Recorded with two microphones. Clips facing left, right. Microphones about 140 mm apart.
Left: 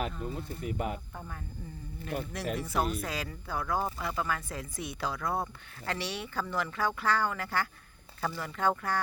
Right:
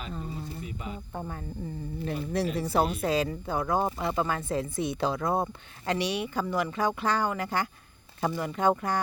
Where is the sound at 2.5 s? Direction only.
30° right (ahead or behind).